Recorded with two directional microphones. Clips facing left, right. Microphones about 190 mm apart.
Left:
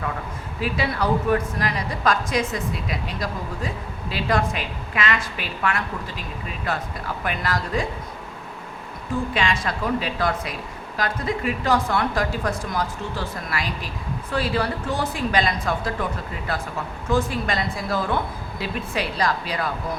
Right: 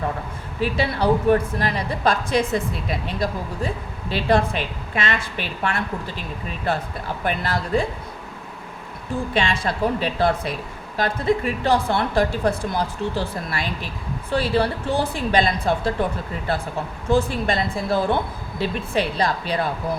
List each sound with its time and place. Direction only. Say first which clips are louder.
0.8 s a woman's voice: right 3 dB; 30° right (ahead or behind)
6.7 s a woman's voice: right 3 dB; 30° right (ahead or behind)
9.3 s a woman's voice: right 2 dB; 30° right (ahead or behind)
17.1 s a woman's voice: right 3 dB; 30° right (ahead or behind)